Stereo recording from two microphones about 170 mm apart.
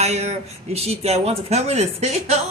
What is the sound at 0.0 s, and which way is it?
Speech, 40° right (ahead or behind).